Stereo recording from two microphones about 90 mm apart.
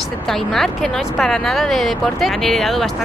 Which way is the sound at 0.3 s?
5° left (ahead or behind).